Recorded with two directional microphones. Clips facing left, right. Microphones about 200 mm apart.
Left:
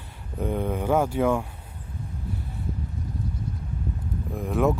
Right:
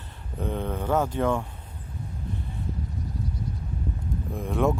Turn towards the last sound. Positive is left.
turn(degrees=0)  # may be behind; listen again after turning